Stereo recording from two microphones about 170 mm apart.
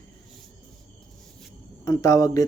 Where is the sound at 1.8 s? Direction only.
20° left (ahead or behind).